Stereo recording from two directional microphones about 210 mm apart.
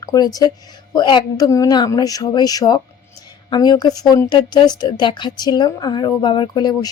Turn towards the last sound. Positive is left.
turn(degrees=20)  # may be behind; listen again after turning